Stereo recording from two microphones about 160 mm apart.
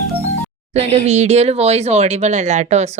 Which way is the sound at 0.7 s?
40° right (ahead or behind).